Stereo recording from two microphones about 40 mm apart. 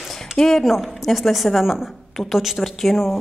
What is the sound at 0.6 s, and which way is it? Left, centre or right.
A woman's voice, centre.